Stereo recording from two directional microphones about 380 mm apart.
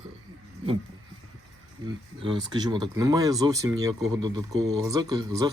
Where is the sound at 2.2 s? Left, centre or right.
Centre.